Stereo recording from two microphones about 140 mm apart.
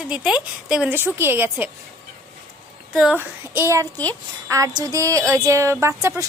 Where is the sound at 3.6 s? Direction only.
20° right (ahead or behind).